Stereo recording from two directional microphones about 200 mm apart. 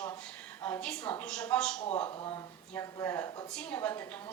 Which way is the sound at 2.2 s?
25° left (ahead or behind).